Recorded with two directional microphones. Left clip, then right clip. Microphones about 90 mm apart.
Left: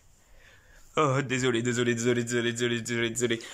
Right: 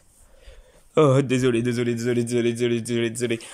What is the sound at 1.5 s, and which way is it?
Speech, 20° right (ahead or behind).